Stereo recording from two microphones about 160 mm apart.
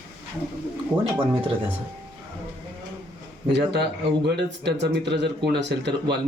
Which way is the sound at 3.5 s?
90° right.